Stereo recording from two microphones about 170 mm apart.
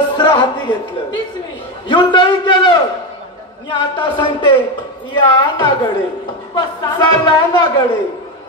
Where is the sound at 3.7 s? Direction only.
25° left (ahead or behind).